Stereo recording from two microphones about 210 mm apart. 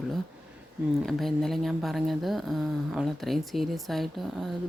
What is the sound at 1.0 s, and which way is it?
Speech, centre (ahead or behind).